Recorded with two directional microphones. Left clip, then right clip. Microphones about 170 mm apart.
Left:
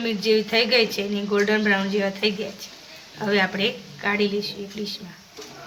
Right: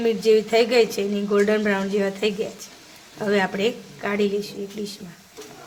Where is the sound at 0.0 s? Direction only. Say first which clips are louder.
Right 3 dB; 90° right.